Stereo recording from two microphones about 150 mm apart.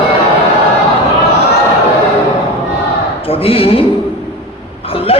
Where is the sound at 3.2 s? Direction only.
40° left (ahead or behind).